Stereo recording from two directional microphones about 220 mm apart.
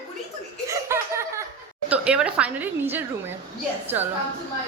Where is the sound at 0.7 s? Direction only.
10° right (ahead or behind).